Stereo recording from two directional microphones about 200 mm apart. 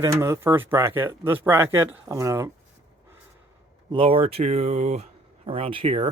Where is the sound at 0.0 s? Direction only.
15° right (ahead or behind).